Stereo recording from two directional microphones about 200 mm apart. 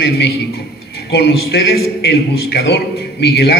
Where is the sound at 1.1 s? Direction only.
55° left (ahead or behind).